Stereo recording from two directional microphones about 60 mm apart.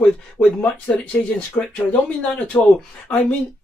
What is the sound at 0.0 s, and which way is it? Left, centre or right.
Speech, left.